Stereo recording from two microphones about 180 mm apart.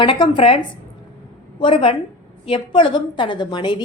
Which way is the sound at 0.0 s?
30° left (ahead or behind).